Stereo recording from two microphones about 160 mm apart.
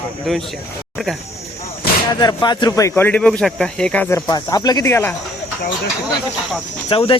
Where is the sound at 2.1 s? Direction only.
25° left (ahead or behind).